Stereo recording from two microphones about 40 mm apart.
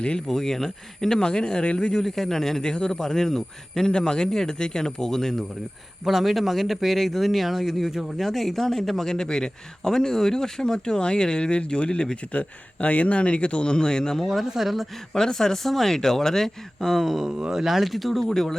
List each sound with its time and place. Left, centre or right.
0.3 s speech: centre
1.2 s speech: left
2.0 s speech: centre
2.6 s speech: left
2.9 s speech: centre
6.1 s a man's voice: centre
8.2 s a man's voice: centre; by 12.1 s left
12.3 s speech: left; by 14.3 s centre
14.3 s a man's voice: centre
15.1 s speech: centre
17.0 s a man's voice: centre